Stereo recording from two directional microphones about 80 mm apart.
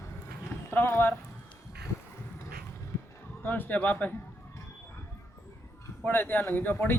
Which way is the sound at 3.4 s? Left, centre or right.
Left.